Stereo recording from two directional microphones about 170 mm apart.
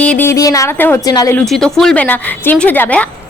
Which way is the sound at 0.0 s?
10° left (ahead or behind).